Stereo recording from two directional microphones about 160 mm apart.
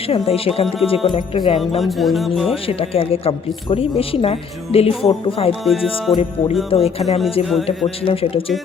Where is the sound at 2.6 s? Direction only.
35° left (ahead or behind).